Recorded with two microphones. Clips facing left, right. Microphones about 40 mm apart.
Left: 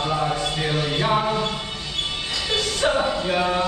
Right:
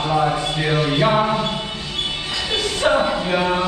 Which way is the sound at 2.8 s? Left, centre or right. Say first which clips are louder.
Right 5 dB; centre.